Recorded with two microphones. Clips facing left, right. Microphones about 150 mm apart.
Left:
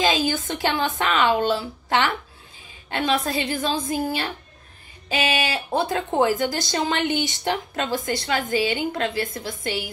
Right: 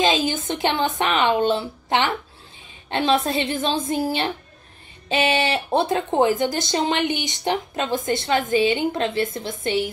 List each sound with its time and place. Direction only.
0.0 s speech: 20° right (ahead or behind)